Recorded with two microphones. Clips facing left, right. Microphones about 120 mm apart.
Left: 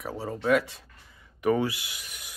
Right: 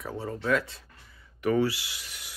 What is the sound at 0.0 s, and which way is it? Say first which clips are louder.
Speech: left 2 dB; 10° left (ahead or behind).